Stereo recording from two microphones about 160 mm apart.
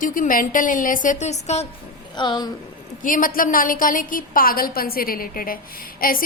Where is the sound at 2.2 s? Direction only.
25° left (ahead or behind).